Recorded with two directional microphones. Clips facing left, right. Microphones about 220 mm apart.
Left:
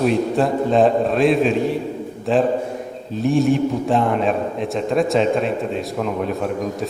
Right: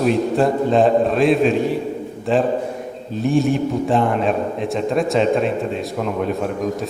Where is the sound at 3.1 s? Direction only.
Centre (ahead or behind).